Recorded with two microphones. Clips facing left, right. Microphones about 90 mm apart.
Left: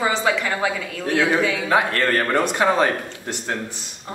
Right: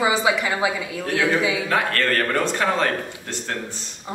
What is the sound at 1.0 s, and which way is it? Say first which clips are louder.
A man's voice: left 2 dB; 15° left (ahead or behind).